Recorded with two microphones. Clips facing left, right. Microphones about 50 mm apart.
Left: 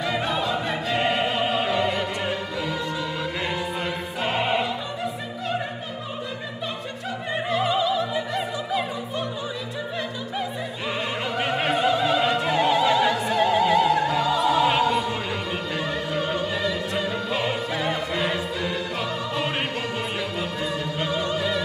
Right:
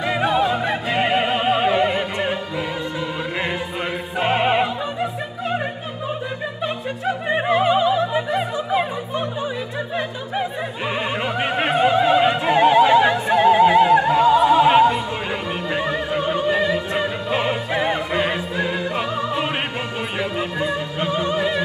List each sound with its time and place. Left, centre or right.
0.0 s opera: right
1.4 s music: right
4.2 s music: right
6.6 s opera: right
11.3 s opera: right
15.7 s music: right